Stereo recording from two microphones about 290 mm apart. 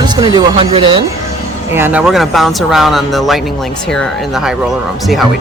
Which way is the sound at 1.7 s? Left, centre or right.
Centre.